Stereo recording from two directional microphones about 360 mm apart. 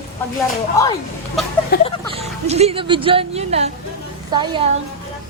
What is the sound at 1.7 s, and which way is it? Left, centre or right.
Speech, left.